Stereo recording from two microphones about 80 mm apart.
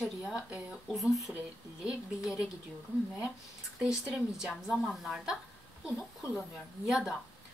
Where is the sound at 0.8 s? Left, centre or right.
Centre.